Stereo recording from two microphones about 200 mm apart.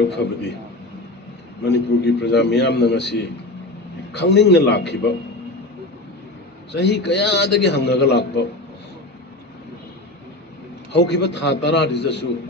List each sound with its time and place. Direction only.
0.1 s a man's voice: 60° left (ahead or behind)
1.6 s a man's voice: 60° left (ahead or behind)
6.7 s a man's voice: 60° left (ahead or behind)
10.9 s a man's voice: 60° left (ahead or behind)